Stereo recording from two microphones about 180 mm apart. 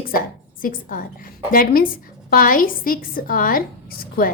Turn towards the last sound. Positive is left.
turn(degrees=55)  # may be behind; listen again after turning